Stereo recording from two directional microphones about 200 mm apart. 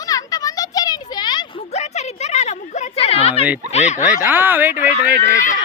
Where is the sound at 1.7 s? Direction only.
35° left (ahead or behind).